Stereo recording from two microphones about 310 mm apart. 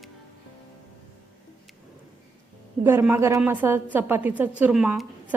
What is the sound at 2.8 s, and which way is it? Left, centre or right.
A woman's voice, centre.